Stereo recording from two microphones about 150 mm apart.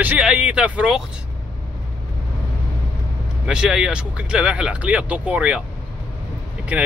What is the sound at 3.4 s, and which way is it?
Speech, 5° right (ahead or behind).